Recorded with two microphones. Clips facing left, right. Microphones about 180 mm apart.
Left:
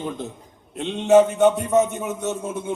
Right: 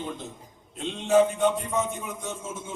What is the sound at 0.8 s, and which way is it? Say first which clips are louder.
A man's voice: left 6 dB; 70° left (ahead or behind).